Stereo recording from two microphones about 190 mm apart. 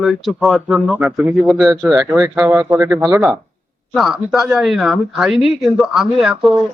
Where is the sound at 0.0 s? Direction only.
Centre (ahead or behind).